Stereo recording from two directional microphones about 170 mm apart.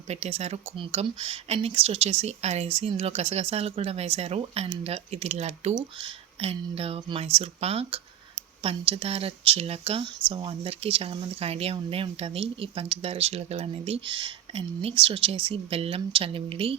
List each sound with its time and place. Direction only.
0.1 s speech: 40° right (ahead or behind)